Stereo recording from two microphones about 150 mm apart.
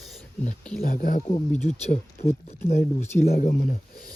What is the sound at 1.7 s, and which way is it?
Speech, 45° left (ahead or behind).